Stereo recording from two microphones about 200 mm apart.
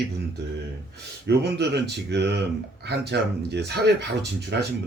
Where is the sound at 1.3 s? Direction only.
55° right (ahead or behind).